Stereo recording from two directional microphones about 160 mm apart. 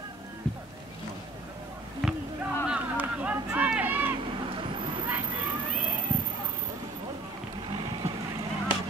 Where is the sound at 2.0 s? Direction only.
Centre (ahead or behind).